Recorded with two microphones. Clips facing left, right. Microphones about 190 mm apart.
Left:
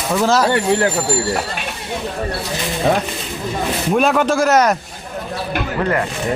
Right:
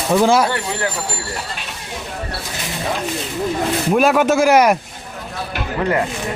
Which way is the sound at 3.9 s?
5° right (ahead or behind).